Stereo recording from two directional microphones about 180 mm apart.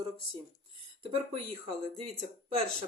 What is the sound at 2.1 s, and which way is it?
Speech, 35° right (ahead or behind).